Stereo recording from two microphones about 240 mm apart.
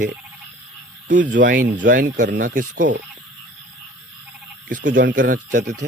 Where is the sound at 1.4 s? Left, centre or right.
Right.